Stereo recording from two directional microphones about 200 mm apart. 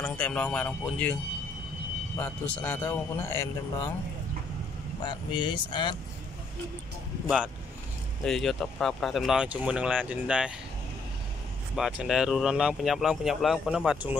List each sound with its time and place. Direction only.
0.0 s a man's voice: 5° left (ahead or behind)
2.1 s a man's voice: 5° left (ahead or behind)
5.0 s speech: 20° left (ahead or behind)
7.2 s speech: 5° right (ahead or behind)
11.7 s speech: centre (ahead or behind)